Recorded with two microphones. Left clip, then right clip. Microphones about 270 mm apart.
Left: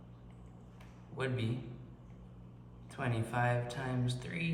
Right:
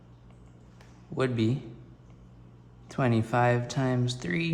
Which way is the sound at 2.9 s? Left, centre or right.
Right.